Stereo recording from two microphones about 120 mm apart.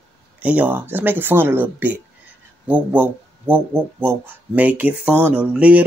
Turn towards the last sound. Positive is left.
turn(degrees=-10)  # may be behind; listen again after turning